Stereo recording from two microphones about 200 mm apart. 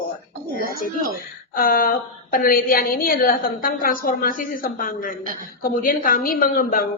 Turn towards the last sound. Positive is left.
turn(degrees=45)  # may be behind; listen again after turning